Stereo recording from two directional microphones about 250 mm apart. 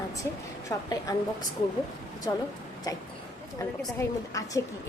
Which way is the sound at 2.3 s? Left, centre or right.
Centre.